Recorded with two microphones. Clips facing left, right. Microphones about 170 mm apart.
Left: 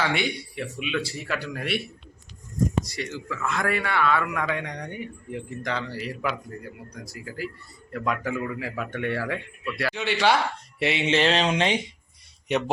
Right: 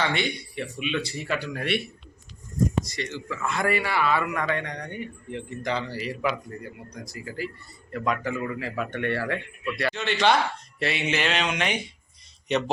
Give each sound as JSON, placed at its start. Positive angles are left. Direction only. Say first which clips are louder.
{"t": 0.0, "sound": "a man's voice", "louder": "left 1 dB", "side_deg": 5}
{"t": 2.8, "sound": "a man's voice", "louder": "even", "side_deg": 10}
{"t": 5.6, "sound": "a man's voice", "louder": "right 2 dB", "side_deg": 0}
{"t": 10.8, "sound": "speech", "louder": "left 4 dB", "side_deg": 20}
{"t": 12.5, "sound": "speech", "louder": "even", "side_deg": 10}